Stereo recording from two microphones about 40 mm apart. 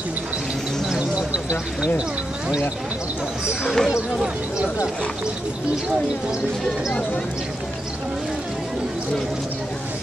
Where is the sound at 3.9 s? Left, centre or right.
Right.